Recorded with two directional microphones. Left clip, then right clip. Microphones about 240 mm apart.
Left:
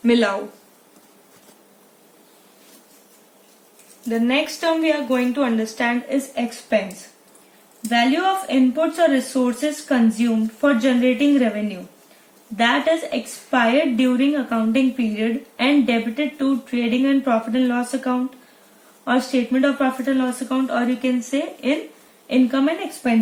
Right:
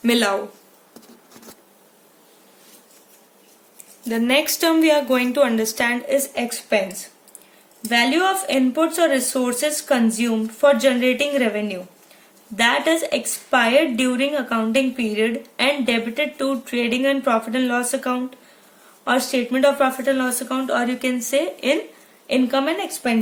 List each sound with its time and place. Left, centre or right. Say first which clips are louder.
0.0 s speech: left 1 dB; right
4.1 s a woman's voice: right 1 dB; right
7.9 s a woman's voice: even; right